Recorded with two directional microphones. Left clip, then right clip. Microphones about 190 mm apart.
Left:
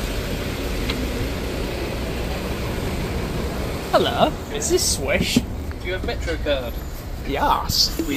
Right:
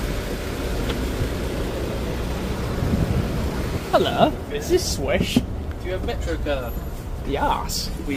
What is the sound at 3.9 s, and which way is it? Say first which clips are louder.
Speech: even; 15° right (ahead or behind).